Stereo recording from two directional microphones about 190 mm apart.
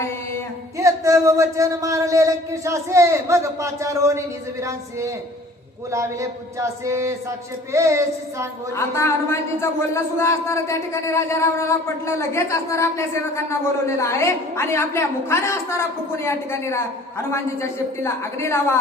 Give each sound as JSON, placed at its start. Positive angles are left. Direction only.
{"t": 0.8, "sound": "a man's voice", "side_deg": -15}
{"t": 8.7, "sound": "a man's voice", "side_deg": 15}